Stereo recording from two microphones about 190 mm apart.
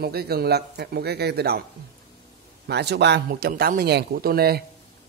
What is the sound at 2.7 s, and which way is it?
Speech, 60° right (ahead or behind).